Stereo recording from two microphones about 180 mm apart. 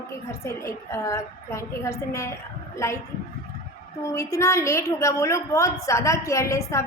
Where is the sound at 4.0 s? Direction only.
15° left (ahead or behind).